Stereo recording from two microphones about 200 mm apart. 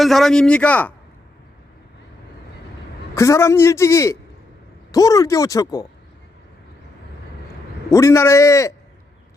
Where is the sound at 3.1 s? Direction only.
15° left (ahead or behind).